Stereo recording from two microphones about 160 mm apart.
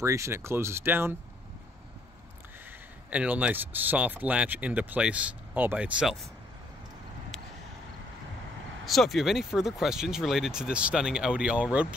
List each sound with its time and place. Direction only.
0.0 s speech: 15° right (ahead or behind)
3.1 s speech: 10° right (ahead or behind)
8.8 s speech: centre (ahead or behind)